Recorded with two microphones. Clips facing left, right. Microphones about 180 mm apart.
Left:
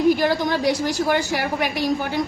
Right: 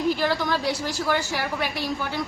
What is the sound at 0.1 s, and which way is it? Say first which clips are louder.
A woman's voice: left 5 dB; 15° left (ahead or behind).